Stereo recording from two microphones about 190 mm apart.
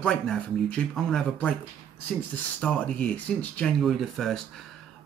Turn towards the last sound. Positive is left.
turn(degrees=0)  # may be behind; listen again after turning